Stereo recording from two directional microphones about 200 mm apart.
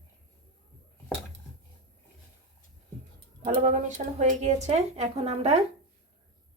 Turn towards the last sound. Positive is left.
turn(degrees=-30)  # may be behind; listen again after turning